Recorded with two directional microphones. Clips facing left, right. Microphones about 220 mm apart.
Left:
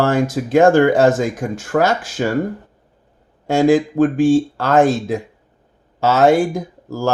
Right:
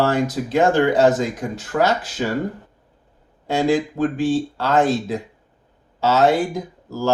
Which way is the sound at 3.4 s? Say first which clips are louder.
Left 5 dB; 50° left (ahead or behind).